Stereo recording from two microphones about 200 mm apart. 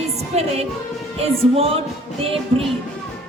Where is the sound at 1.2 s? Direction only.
30° right (ahead or behind).